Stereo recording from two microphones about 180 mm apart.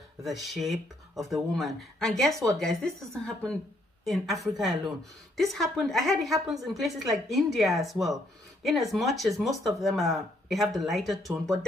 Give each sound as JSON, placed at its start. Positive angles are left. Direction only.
{"t": 0.2, "sound": "speech", "side_deg": 0}